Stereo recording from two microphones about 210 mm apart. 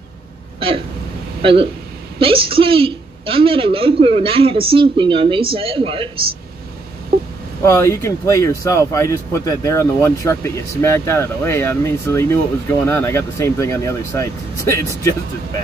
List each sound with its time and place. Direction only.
1.4 s a woman's voice: 25° right (ahead or behind)
7.6 s speech: 15° left (ahead or behind)